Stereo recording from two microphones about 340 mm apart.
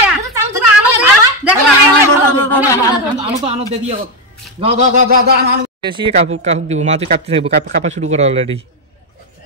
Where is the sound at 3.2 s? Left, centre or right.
Centre.